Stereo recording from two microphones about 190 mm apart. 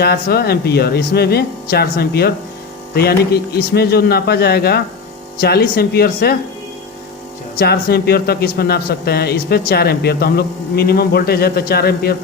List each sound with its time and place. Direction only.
0.0 s a man's voice: 55° left (ahead or behind)
7.6 s a man's voice: 55° left (ahead or behind)